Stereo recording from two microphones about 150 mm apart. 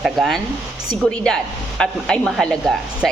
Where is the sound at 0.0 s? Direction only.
Centre (ahead or behind).